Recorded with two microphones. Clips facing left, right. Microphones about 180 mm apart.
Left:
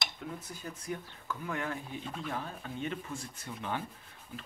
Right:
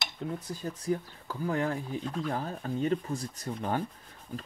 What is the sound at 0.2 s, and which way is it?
Speech, 35° right (ahead or behind).